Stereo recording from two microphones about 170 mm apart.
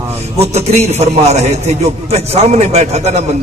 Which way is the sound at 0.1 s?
40° right (ahead or behind).